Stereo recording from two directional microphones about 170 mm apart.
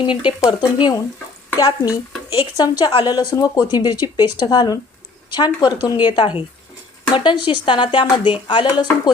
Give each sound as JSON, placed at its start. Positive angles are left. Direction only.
{"t": 0.0, "sound": "a woman's voice", "side_deg": 30}